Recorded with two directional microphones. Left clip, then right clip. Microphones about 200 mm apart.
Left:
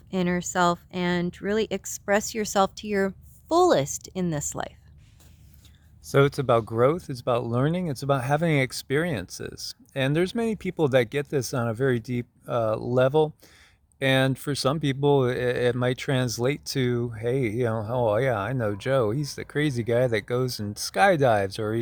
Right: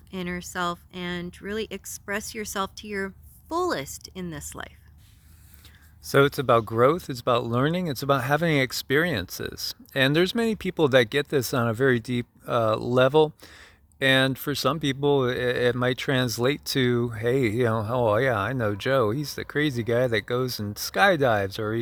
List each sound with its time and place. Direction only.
0.1 s speech: 35° left (ahead or behind)
6.0 s speech: 15° right (ahead or behind)